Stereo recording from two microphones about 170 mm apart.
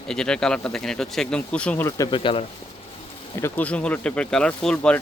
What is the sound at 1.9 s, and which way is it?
Speech, 20° left (ahead or behind).